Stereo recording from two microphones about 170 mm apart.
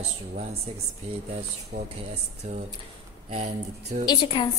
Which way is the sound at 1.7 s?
45° right (ahead or behind).